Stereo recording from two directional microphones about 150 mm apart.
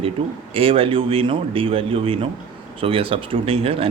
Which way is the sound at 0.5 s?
40° right (ahead or behind).